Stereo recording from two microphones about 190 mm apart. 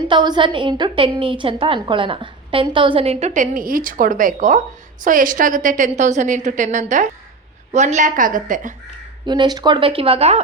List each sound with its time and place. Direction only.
0.1 s a woman's voice: 25° right (ahead or behind); by 8.7 s 45° right (ahead or behind)
9.2 s a woman's voice: 25° right (ahead or behind)